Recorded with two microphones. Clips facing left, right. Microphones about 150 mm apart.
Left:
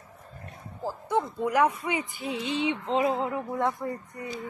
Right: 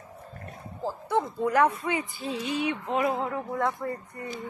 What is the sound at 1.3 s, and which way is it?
Speech, 15° left (ahead or behind).